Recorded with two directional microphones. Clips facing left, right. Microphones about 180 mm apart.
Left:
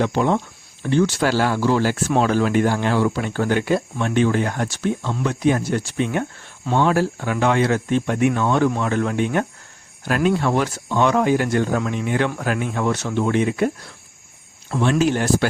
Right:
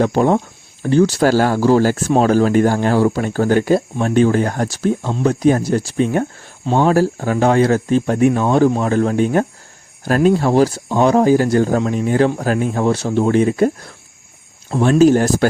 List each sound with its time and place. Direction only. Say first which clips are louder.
0.0 s speech: right 5 dB; 45° right (ahead or behind)